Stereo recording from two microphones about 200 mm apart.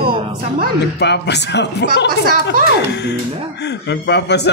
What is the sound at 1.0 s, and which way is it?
A man's voice, 60° left (ahead or behind).